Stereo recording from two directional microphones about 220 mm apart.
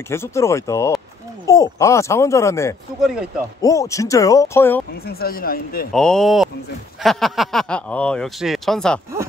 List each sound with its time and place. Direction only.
0.1 s speech: 10° left (ahead or behind)
5.0 s speech: 40° left (ahead or behind)
5.9 s speech: centre (ahead or behind)